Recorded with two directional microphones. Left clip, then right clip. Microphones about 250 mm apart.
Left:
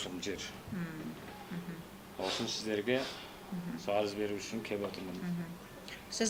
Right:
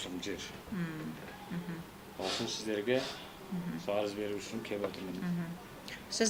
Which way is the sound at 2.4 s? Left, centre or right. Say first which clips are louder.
Even; left.